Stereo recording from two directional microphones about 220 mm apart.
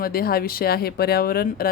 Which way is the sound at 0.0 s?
45° left (ahead or behind).